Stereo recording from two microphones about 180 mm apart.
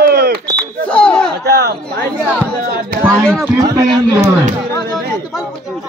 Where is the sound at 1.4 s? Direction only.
65° right (ahead or behind).